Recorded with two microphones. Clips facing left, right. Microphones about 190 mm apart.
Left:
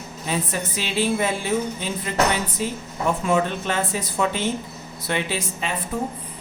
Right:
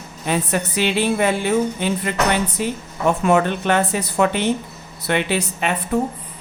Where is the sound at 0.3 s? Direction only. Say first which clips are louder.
Right 5 dB; 65° right (ahead or behind).